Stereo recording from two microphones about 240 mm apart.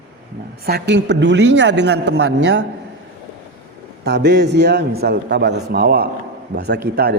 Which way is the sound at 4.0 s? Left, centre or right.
Right.